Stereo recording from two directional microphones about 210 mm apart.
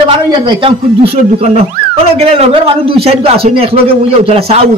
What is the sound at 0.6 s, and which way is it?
Speech, 25° right (ahead or behind).